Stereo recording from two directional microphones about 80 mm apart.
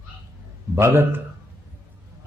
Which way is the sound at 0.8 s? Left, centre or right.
Right.